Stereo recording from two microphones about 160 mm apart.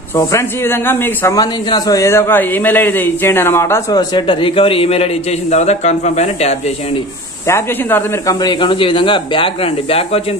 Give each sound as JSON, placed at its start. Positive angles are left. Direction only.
{"t": 0.1, "sound": "a man's voice", "side_deg": 20}
{"t": 7.4, "sound": "speech", "side_deg": 15}